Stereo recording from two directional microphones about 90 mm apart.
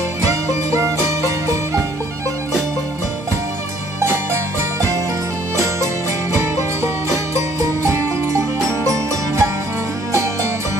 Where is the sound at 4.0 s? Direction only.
30° right (ahead or behind).